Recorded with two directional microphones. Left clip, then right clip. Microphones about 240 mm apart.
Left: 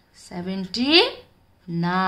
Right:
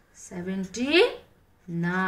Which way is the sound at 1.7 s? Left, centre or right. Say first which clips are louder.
Left 5 dB; left.